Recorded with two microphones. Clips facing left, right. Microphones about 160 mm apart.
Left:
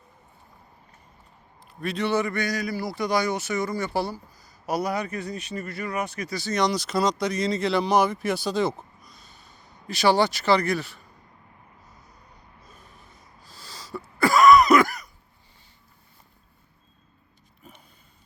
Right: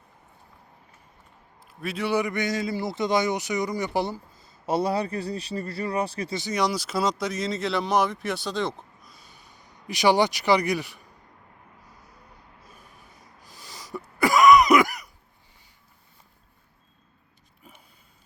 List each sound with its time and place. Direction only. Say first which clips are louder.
1.6 s a man's voice: left 2 dB; 5° right (ahead or behind); by 6.5 s 25° right (ahead or behind)
6.5 s speech: left 2 dB; 5° right (ahead or behind)
12.6 s wheeze: left 1 dB; 10° right (ahead or behind)